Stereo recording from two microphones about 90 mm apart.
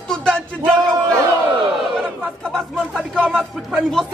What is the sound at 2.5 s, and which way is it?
Speech, 5° left (ahead or behind).